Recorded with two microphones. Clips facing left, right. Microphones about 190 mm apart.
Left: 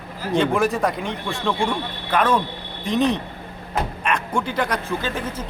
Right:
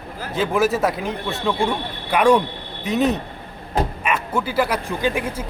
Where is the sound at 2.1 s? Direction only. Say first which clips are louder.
Right 4 dB; 15° right (ahead or behind).